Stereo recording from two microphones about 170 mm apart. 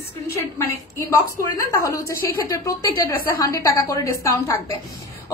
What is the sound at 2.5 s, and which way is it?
A woman's voice, 20° left (ahead or behind).